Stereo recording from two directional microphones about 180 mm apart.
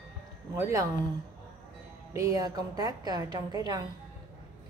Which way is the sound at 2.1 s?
20° right (ahead or behind).